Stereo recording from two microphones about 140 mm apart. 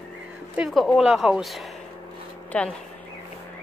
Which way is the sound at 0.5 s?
Centre (ahead or behind).